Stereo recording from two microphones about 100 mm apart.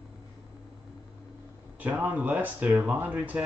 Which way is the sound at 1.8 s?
15° right (ahead or behind).